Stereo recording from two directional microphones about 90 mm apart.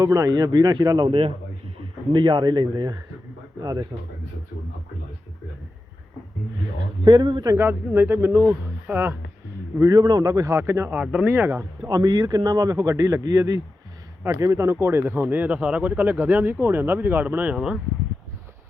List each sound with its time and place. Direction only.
0.0 s speech: 40° right (ahead or behind)
2.1 s speech: 60° right (ahead or behind); by 3.8 s 45° right (ahead or behind)
7.0 s speech: 55° right (ahead or behind)
7.5 s speech: 25° right (ahead or behind)
9.9 s speech: 45° right (ahead or behind); by 10.9 s 30° right (ahead or behind)
10.9 s speech: 15° right (ahead or behind)
11.9 s speech: 50° right (ahead or behind)
12.7 s speech: 35° right (ahead or behind); by 17.6 s 15° right (ahead or behind)